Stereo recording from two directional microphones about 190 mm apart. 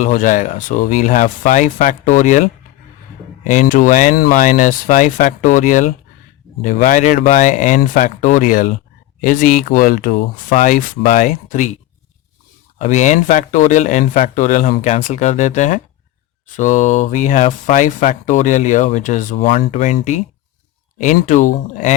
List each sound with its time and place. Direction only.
0.0 s speech: 45° left (ahead or behind)
12.8 s speech: 40° left (ahead or behind)
19.4 s speech: 30° left (ahead or behind)